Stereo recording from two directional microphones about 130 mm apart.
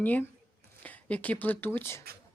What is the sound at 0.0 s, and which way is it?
Speech, 15° left (ahead or behind).